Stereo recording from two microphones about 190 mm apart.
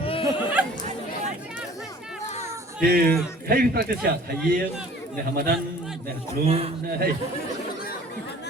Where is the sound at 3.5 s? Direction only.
50° right (ahead or behind).